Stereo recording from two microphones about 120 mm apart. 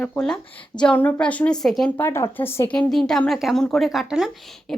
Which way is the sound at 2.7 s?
5° left (ahead or behind).